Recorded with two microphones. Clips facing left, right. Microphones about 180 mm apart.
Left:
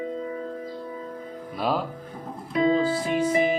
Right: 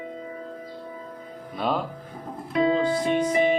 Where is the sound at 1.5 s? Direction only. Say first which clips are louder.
Even; 5° left (ahead or behind).